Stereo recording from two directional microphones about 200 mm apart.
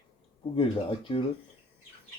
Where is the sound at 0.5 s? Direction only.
25° left (ahead or behind).